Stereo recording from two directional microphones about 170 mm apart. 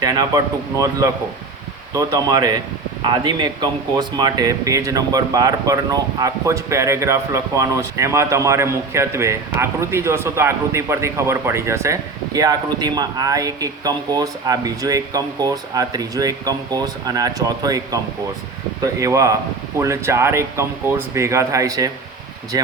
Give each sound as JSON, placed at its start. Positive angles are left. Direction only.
{"t": 0.0, "sound": "speech", "side_deg": -20}